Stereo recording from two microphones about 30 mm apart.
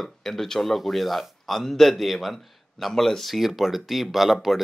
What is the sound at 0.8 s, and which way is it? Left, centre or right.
Speech, centre.